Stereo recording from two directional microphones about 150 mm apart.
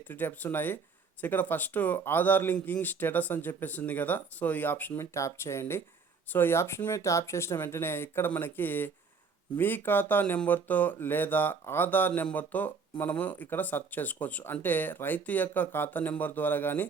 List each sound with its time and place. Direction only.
0.1 s speech: 15° left (ahead or behind)